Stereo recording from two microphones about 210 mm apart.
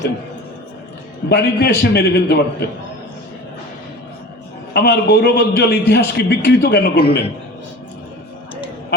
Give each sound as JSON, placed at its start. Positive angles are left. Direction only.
{"t": 1.3, "sound": "a man's voice", "side_deg": 50}
{"t": 4.7, "sound": "a man's voice", "side_deg": 50}